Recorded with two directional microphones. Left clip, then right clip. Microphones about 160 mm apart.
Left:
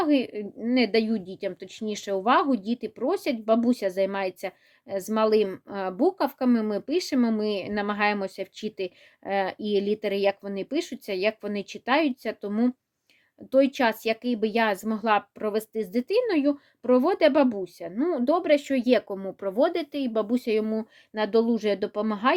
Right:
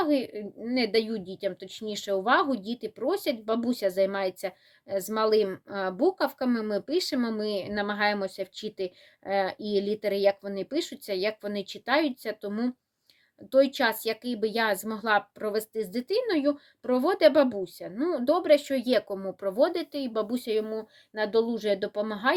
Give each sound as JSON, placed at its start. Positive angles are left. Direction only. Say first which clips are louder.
{"t": 0.0, "sound": "a woman's voice", "louder": "left 2 dB", "side_deg": 50}